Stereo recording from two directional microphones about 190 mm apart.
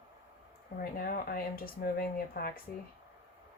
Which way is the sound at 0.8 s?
50° left (ahead or behind).